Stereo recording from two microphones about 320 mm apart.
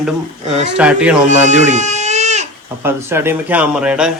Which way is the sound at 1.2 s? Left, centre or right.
Right.